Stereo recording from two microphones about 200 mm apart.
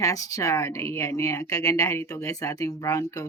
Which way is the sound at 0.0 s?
15° left (ahead or behind).